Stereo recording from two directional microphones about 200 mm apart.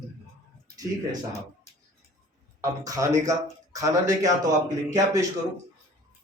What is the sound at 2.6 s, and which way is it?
A man's voice, 15° right (ahead or behind).